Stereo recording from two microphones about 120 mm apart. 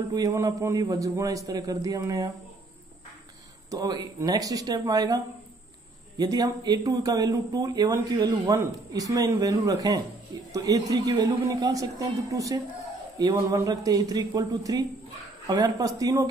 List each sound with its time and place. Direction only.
0.1 s speech: 30° right (ahead or behind)
3.7 s speech: 30° right (ahead or behind)